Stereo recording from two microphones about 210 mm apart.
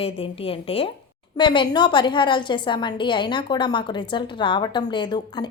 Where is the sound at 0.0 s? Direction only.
25° left (ahead or behind).